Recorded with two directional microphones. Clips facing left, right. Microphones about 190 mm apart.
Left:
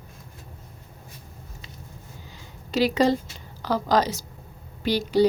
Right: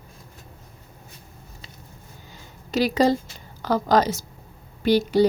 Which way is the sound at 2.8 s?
40° right (ahead or behind).